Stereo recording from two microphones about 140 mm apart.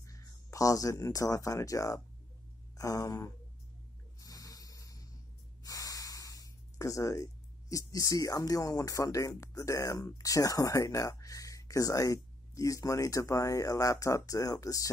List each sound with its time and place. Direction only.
0.0 s speech: 20° left (ahead or behind)
4.2 s a sound: 25° left (ahead or behind)
5.6 s snort: 25° left (ahead or behind)
7.7 s speech: 25° left (ahead or behind)